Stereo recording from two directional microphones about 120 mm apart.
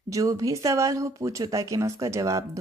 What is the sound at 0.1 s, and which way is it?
A woman's voice, 30° right (ahead or behind).